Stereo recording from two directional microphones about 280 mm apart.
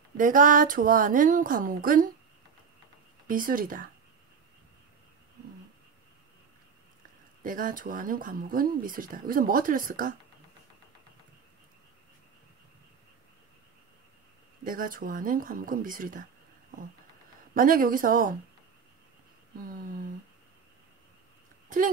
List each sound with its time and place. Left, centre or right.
0.2 s speech: right
3.3 s speech: right
7.4 s speech: right
14.6 s speech: right
17.6 s speech: right
19.6 s speech: right
21.6 s a sound: right